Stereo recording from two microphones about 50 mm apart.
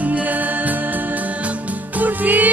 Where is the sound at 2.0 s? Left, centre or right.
Right.